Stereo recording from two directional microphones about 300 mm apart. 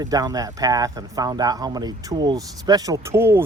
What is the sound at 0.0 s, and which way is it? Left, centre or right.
Speech, centre.